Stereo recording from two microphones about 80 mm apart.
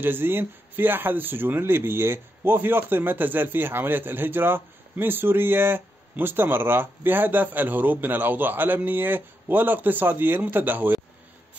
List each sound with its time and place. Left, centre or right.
0.0 s speech: right